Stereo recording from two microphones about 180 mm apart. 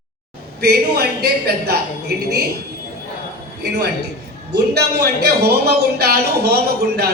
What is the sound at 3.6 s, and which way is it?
Speech, 65° right (ahead or behind).